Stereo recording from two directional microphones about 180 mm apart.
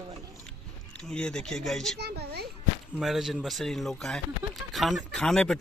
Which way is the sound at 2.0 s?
60° right (ahead or behind).